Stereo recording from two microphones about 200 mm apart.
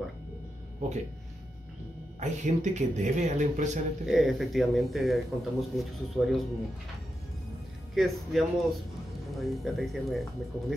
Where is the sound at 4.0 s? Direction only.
Centre (ahead or behind).